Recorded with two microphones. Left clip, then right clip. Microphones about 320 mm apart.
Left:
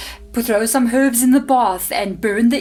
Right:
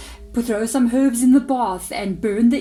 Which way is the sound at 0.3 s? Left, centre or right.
Left.